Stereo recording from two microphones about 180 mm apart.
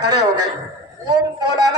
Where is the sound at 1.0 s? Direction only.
20° right (ahead or behind).